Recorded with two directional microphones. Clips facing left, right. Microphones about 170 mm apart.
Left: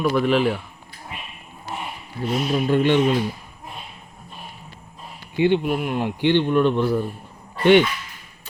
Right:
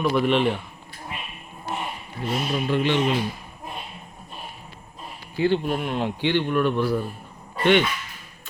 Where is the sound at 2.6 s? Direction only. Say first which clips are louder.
Left 4 dB; 50° left (ahead or behind).